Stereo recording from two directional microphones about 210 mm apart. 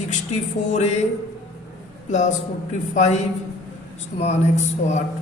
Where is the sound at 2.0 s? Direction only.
35° left (ahead or behind).